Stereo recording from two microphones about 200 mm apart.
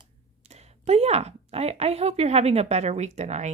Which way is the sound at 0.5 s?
30° right (ahead or behind).